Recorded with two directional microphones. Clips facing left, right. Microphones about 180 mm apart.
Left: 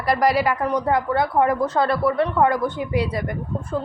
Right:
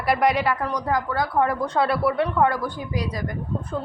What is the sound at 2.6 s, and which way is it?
Speech, 30° left (ahead or behind).